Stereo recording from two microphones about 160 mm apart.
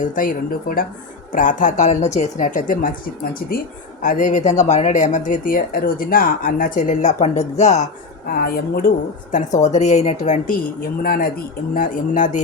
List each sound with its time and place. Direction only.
0.2 s speech: 60° left (ahead or behind)
4.0 s speech: 55° left (ahead or behind)
8.3 s a woman's voice: 70° left (ahead or behind)
9.3 s speech: 45° left (ahead or behind)
11.0 s speech: 65° left (ahead or behind)